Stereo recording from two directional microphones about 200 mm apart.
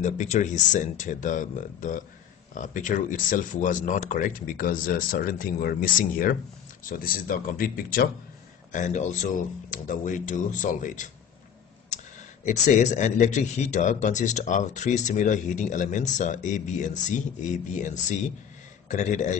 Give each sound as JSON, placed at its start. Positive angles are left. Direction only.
{"t": 0.0, "sound": "speech", "side_deg": 35}
{"t": 12.4, "sound": "speech", "side_deg": 35}